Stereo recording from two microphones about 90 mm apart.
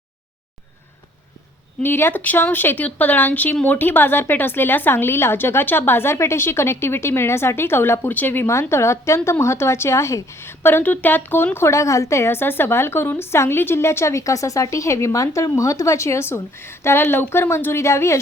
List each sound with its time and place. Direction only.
1.8 s a woman's voice: 25° left (ahead or behind)